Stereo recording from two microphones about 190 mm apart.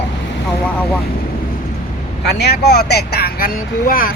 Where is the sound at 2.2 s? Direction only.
60° left (ahead or behind).